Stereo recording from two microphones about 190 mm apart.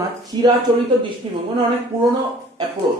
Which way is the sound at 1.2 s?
30° right (ahead or behind).